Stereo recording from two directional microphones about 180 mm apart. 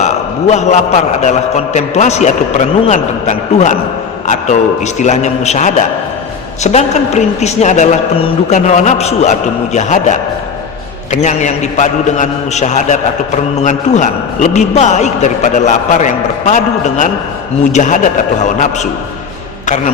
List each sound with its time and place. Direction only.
0.0 s a man's voice: 40° left (ahead or behind)